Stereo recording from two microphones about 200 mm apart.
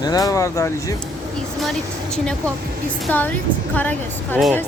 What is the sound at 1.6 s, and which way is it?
A woman's voice, centre (ahead or behind).